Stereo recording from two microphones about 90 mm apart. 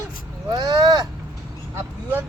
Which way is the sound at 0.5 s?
55° right (ahead or behind).